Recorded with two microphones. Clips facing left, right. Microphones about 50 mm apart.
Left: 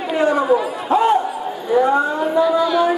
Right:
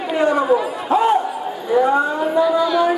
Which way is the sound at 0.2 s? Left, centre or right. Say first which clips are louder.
Even; centre.